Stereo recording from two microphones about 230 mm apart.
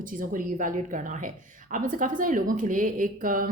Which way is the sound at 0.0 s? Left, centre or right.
Right.